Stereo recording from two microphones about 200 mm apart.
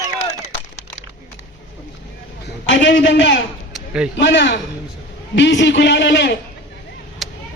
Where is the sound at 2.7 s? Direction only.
70° left (ahead or behind).